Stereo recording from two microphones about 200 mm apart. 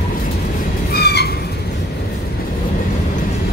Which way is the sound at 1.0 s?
50° left (ahead or behind).